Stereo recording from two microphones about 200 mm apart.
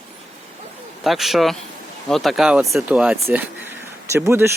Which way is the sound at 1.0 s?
Centre (ahead or behind).